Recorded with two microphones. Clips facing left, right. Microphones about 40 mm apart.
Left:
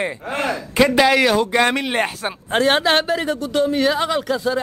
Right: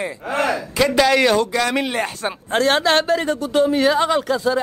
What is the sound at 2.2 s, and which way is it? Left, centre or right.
A man's voice, centre.